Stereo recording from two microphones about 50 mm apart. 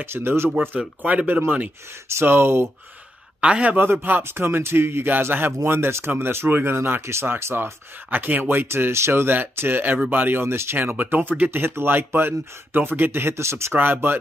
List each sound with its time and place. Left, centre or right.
0.0 s speech: right
1.0 s speech: right
2.0 s speech: right
3.3 s a man's voice: right
3.7 s speech: right
4.2 s speech: right
5.7 s speech: right
8.1 s speech: right
8.6 s speech: right
10.4 s speech: right
13.3 s speech: right
13.7 s speech: right